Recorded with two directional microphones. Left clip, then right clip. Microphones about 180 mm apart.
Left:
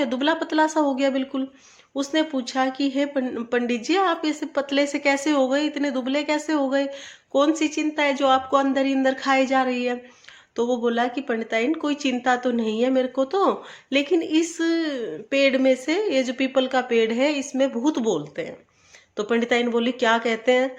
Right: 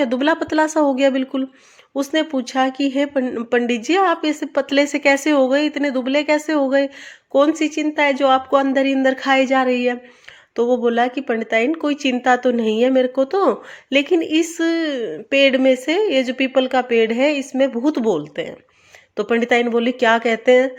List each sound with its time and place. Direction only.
0.0 s speech: 35° right (ahead or behind)